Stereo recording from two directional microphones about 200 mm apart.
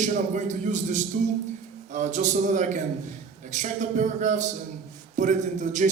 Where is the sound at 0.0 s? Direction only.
35° right (ahead or behind).